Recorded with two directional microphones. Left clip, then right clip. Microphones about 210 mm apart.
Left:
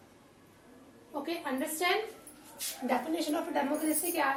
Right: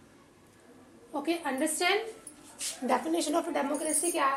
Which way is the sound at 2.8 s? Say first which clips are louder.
Right 3 dB; 40° right (ahead or behind).